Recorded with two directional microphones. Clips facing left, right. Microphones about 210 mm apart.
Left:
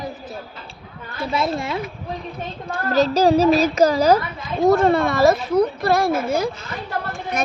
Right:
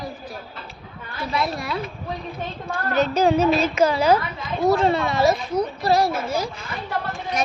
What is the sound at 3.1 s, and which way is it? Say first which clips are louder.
A woman's voice: left 3 dB; 35° left (ahead or behind).